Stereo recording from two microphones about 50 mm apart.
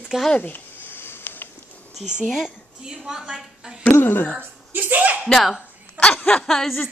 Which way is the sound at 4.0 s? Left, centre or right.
Left.